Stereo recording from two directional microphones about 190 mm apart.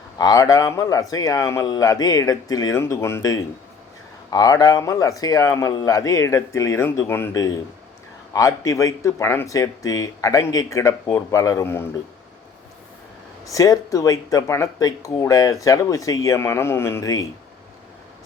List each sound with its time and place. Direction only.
0.2 s speech: 20° left (ahead or behind)
13.4 s speech: 15° left (ahead or behind)